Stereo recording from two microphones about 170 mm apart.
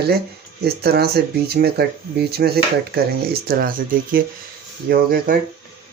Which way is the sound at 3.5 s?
55° right (ahead or behind).